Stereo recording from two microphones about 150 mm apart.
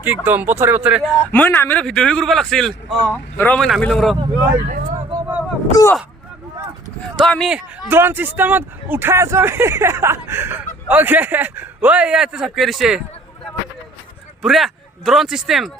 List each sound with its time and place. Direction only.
0.0 s speech: 10° right (ahead or behind)
1.2 s a man's voice: 10° left (ahead or behind)
4.6 s speech: 70° right (ahead or behind)
5.7 s speech: 20° left (ahead or behind)
7.2 s a man's voice: 5° left (ahead or behind)
7.9 s speech: 15° right (ahead or behind)
14.4 s speech: centre (ahead or behind)